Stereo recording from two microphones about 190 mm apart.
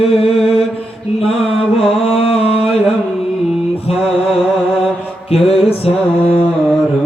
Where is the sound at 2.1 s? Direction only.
30° left (ahead or behind).